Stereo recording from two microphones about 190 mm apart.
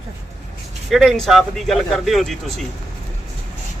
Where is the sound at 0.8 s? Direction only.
Centre (ahead or behind).